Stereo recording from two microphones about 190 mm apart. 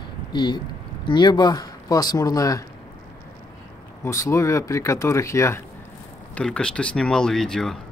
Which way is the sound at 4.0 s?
15° left (ahead or behind).